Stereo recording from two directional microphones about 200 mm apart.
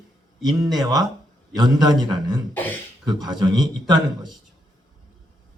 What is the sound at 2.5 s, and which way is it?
Speech, 10° left (ahead or behind).